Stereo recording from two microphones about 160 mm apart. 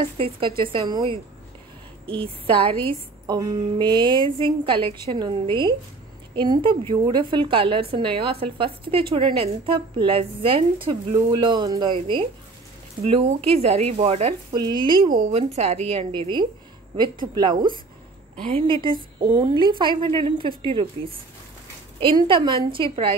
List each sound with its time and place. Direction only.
0.0 s a woman's voice: 35° right (ahead or behind)
2.2 s a woman's voice: 35° right (ahead or behind)
14.5 s a woman's voice: 25° right (ahead or behind)
15.3 s a woman's voice: 40° right (ahead or behind)